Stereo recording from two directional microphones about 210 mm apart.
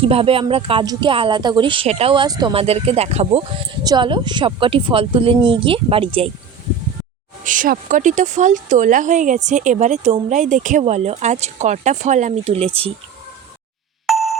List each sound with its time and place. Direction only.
0.0 s speech: 25° right (ahead or behind)
7.4 s speech: 40° right (ahead or behind)
14.1 s music: centre (ahead or behind)